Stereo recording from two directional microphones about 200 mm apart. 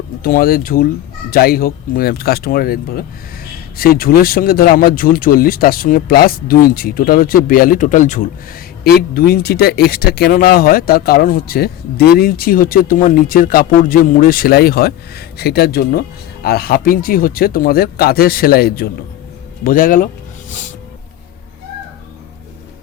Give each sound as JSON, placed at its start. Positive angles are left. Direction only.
{"t": 0.2, "sound": "speech", "side_deg": 45}